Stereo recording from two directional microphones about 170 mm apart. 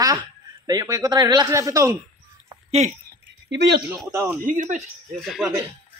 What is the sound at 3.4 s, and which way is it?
Speech, 90° right.